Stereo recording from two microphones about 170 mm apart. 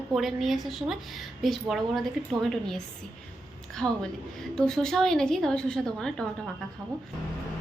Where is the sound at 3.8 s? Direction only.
5° left (ahead or behind).